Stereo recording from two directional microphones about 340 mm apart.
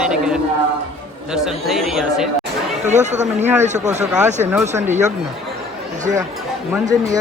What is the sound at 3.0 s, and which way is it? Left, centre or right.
Speech, centre.